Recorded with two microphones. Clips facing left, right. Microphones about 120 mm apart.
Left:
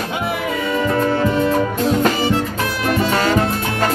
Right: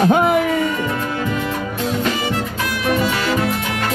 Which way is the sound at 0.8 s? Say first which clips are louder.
Left 5 dB; 40° left (ahead or behind).